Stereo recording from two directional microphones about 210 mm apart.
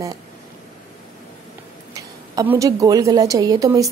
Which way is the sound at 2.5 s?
15° right (ahead or behind).